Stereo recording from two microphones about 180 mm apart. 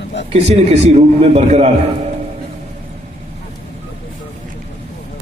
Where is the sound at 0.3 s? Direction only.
40° right (ahead or behind).